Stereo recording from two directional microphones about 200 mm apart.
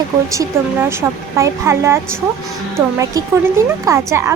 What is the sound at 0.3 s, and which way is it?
Speech, 15° right (ahead or behind).